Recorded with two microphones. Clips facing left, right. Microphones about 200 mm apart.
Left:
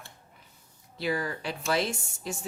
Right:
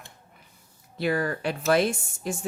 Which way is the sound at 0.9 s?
55° right (ahead or behind).